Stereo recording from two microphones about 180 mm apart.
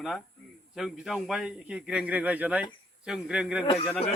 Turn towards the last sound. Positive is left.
turn(degrees=35)  # may be behind; listen again after turning